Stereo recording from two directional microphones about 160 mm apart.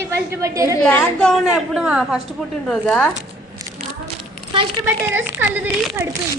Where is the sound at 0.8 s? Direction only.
10° left (ahead or behind).